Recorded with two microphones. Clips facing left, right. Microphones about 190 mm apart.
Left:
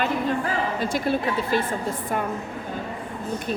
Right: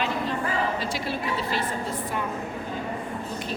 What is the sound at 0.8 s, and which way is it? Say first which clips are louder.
Speech: left 6 dB; 50° left (ahead or behind).